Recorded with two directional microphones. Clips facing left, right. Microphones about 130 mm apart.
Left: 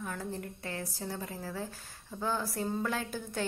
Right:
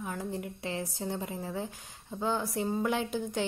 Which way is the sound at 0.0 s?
15° right (ahead or behind).